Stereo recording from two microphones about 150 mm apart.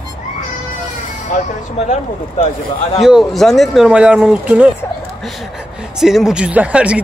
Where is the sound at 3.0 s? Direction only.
Centre (ahead or behind).